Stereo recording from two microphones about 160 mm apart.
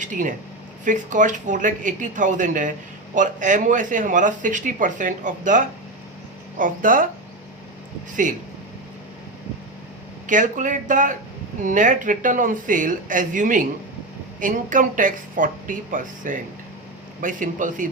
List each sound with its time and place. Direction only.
0.0 s speech: 55° right (ahead or behind)
8.1 s speech: 55° right (ahead or behind)
10.2 s speech: 55° right (ahead or behind)